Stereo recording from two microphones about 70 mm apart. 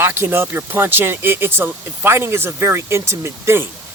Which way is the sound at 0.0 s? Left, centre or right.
Right.